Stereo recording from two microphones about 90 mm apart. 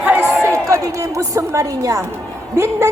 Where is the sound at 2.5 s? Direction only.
35° right (ahead or behind).